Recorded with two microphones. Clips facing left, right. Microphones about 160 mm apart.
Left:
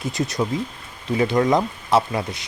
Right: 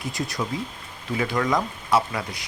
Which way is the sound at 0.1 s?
25° left (ahead or behind).